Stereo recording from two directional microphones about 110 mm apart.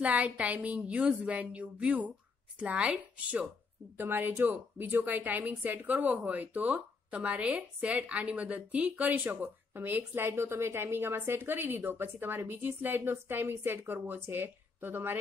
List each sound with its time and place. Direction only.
0.0 s a woman's voice: 15° right (ahead or behind)